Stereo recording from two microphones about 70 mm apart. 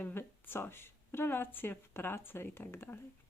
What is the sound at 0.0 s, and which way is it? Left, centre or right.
Speech, left.